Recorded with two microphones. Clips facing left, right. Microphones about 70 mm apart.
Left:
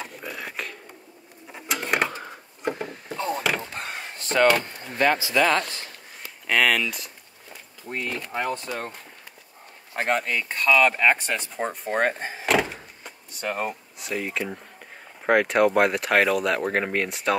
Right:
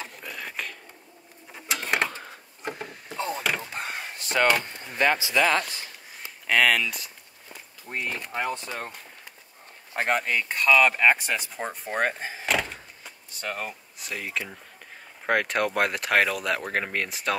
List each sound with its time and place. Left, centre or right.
0.0 s a sound: centre
5.3 s speech: centre
7.9 s speech: centre
10.0 s speech: centre